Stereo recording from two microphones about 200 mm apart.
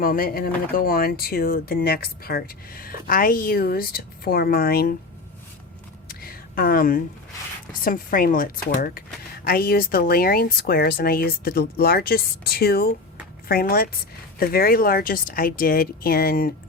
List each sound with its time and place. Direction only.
0.0 s speech: 45° left (ahead or behind)
6.1 s a sound: 50° left (ahead or behind)
7.7 s speech: 45° left (ahead or behind)